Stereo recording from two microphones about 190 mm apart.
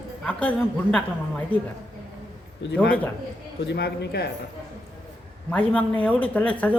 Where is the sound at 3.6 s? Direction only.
65° left (ahead or behind).